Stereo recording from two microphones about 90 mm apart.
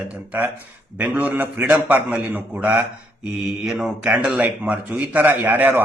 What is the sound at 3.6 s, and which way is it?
A man's voice, 5° right (ahead or behind).